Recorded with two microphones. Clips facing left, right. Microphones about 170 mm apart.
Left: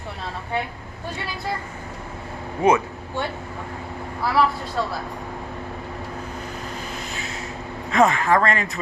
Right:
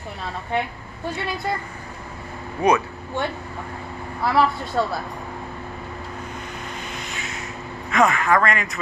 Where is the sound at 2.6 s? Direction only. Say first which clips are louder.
Left 1 dB; 25° left (ahead or behind).